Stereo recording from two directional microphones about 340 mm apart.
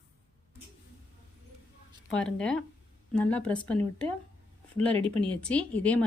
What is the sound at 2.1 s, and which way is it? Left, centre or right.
Speech, centre.